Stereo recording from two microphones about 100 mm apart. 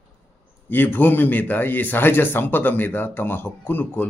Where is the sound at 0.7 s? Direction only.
20° left (ahead or behind).